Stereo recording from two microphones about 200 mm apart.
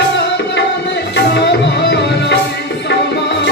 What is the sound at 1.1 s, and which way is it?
Tabla, 60° left (ahead or behind).